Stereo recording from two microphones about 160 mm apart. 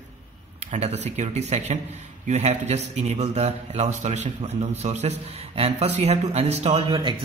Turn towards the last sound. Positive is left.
turn(degrees=-40)  # may be behind; listen again after turning